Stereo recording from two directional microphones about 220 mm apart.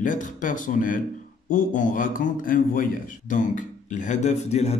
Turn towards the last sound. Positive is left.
turn(degrees=30)  # may be behind; listen again after turning